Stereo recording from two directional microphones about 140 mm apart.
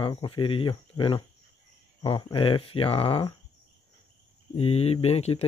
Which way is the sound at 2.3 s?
40° left (ahead or behind).